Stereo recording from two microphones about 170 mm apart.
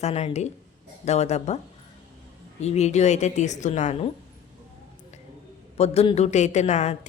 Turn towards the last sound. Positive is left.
turn(degrees=45)  # may be behind; listen again after turning